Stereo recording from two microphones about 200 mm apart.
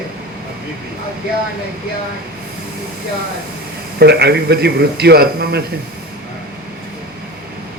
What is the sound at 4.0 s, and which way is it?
A man's voice, 55° right (ahead or behind).